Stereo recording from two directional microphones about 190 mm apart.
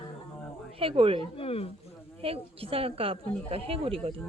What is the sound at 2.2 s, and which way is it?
A woman's voice, 30° right (ahead or behind).